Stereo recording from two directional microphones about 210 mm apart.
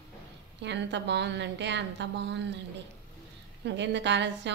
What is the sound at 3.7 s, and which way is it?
Speech, 55° right (ahead or behind).